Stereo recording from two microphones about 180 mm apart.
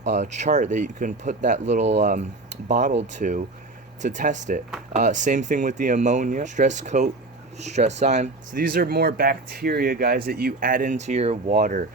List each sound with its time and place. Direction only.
0.0 s speech: 40° right (ahead or behind)